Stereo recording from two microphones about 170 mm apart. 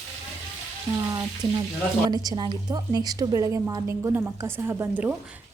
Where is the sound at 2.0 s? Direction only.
20° right (ahead or behind).